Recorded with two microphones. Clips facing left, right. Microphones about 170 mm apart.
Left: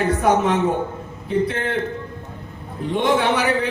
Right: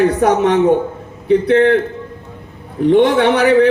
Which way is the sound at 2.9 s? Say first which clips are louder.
Right 8 dB; 65° right (ahead or behind).